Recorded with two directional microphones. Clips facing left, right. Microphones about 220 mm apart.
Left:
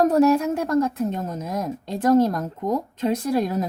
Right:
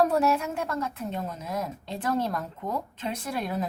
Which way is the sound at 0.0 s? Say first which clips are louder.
Left 7 dB; 40° left (ahead or behind).